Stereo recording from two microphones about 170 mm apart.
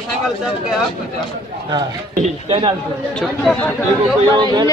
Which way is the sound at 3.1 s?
5° left (ahead or behind).